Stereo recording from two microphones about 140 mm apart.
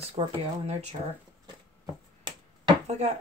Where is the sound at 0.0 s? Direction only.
40° right (ahead or behind).